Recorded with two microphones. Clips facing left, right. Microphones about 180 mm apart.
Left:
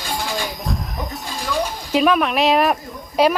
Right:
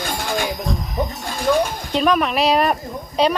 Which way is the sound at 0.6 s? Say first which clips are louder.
Right 2 dB; centre (ahead or behind).